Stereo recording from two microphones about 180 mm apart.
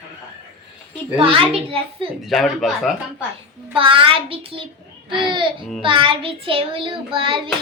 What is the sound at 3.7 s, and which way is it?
Child singing, 30° right (ahead or behind).